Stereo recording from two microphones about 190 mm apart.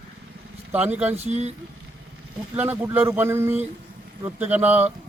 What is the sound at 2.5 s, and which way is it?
Speech, 10° right (ahead or behind).